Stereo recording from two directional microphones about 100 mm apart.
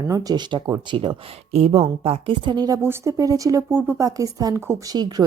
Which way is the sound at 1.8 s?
75° right (ahead or behind).